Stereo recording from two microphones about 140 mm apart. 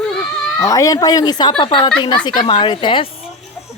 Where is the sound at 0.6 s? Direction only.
25° left (ahead or behind).